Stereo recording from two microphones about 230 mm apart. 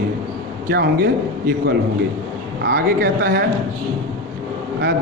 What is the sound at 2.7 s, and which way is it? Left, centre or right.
Speech, right.